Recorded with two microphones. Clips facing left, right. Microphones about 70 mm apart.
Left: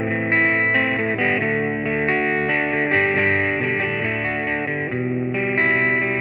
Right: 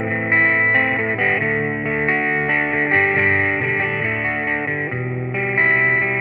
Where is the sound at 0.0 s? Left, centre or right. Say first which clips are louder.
Right 1 dB; right.